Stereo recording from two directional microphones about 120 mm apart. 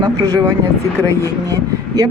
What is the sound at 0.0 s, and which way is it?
Speech, 35° right (ahead or behind).